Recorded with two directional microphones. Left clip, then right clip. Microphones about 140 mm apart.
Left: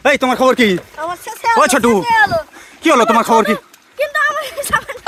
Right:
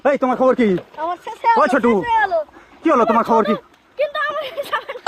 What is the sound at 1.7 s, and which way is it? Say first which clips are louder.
Speech: left 3 dB; 40° left (ahead or behind).